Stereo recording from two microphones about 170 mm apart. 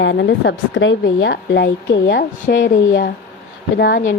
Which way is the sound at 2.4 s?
55° left (ahead or behind).